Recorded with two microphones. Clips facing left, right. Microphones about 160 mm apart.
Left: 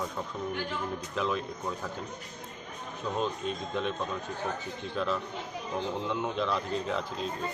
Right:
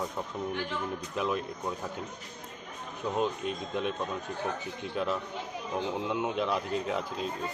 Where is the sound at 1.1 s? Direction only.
10° right (ahead or behind).